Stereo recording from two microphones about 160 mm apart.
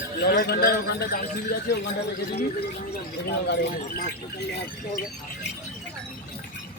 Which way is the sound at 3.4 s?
85° left.